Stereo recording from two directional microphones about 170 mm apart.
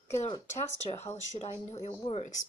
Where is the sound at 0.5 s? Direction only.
40° left (ahead or behind).